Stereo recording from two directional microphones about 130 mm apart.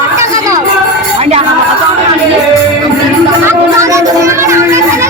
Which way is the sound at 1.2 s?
55° right (ahead or behind).